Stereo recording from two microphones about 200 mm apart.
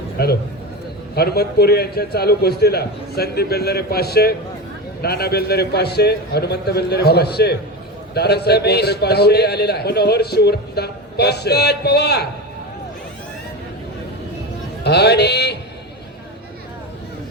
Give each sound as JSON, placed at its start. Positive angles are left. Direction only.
{"t": 0.2, "sound": "a man's voice", "side_deg": 50}
{"t": 14.8, "sound": "music", "side_deg": 55}